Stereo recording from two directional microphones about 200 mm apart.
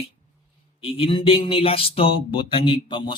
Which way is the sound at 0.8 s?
30° left (ahead or behind).